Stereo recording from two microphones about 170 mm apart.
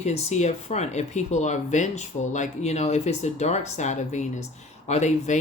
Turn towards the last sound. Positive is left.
turn(degrees=45)  # may be behind; listen again after turning